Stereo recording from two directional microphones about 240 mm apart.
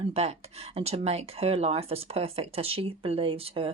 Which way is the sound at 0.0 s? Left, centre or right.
Right.